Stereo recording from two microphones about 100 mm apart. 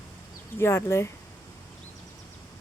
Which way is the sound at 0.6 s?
25° left (ahead or behind).